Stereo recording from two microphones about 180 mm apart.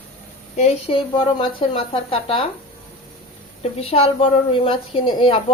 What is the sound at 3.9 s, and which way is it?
A woman's voice, 30° left (ahead or behind).